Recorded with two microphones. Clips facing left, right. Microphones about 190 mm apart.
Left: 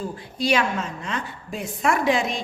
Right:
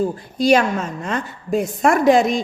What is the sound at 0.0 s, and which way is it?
A woman's voice, 45° right (ahead or behind).